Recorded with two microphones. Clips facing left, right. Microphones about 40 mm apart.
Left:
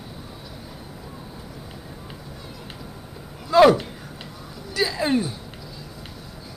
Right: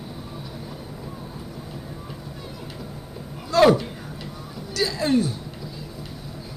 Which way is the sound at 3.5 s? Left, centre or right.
Centre.